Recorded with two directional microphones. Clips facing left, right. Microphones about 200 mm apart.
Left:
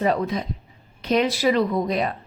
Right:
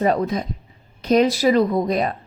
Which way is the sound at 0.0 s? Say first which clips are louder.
Right 3 dB; 45° right (ahead or behind).